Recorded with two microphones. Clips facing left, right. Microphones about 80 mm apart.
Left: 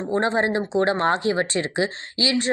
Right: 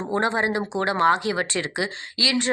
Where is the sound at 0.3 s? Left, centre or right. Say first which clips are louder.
Left 3 dB; left.